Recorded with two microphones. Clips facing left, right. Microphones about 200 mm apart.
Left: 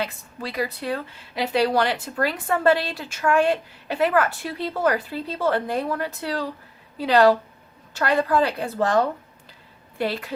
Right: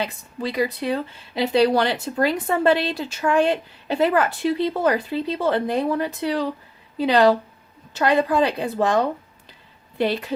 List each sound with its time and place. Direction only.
0.0 s a woman's voice: 20° right (ahead or behind)